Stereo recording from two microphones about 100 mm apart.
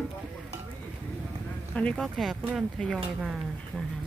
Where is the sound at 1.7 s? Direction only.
10° left (ahead or behind).